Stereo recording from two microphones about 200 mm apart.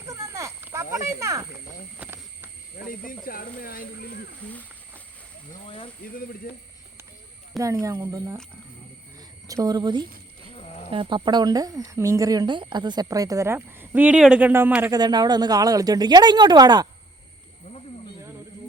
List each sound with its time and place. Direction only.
0.1 s snake: 15° right (ahead or behind)
2.0 s a sound: 10° right (ahead or behind)
3.2 s speech: 45° left (ahead or behind)
5.6 s speech: 25° left (ahead or behind)
6.5 s speech: 45° left (ahead or behind)
7.6 s speech: 15° right (ahead or behind)
9.5 s speech: 20° right (ahead or behind)
10.5 s livestock: 30° left (ahead or behind)
10.9 s speech: 25° right (ahead or behind)